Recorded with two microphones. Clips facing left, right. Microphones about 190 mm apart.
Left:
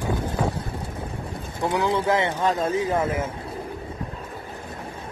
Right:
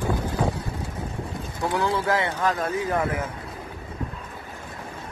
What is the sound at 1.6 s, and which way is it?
Speech, 20° left (ahead or behind).